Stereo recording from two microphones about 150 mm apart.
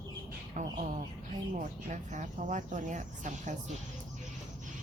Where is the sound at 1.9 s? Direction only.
55° right (ahead or behind).